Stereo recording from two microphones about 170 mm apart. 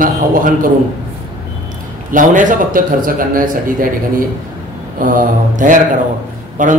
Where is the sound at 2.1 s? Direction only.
50° right (ahead or behind).